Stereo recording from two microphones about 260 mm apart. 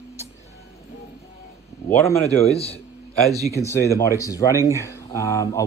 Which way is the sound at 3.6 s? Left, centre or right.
Centre.